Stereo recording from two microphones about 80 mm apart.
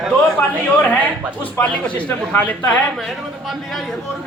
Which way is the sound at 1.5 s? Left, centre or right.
Centre.